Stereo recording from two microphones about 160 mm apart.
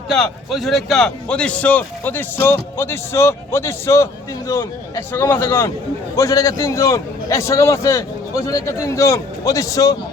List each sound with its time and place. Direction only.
0.1 s a man's voice: centre (ahead or behind); by 10.0 s 20° left (ahead or behind)